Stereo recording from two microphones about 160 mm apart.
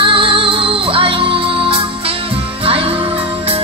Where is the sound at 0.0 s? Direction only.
35° right (ahead or behind).